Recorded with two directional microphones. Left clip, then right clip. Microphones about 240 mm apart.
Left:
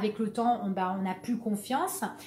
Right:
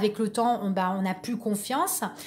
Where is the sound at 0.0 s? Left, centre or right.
Right.